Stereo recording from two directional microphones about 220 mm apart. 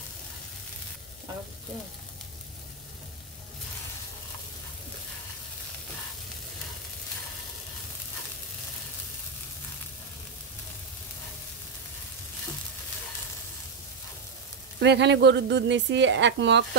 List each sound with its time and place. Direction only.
14.8 s speech: 50° right (ahead or behind)